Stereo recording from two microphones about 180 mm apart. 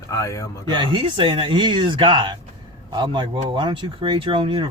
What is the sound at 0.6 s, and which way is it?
Speech, 25° right (ahead or behind).